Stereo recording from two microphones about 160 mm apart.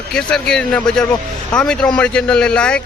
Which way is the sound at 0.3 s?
5° left (ahead or behind).